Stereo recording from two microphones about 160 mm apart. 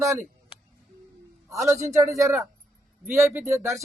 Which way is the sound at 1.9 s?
20° right (ahead or behind).